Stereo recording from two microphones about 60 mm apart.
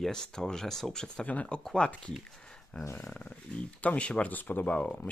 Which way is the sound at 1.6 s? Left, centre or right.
Centre.